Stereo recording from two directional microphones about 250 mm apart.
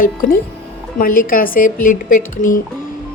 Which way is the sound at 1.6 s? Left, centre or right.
Left.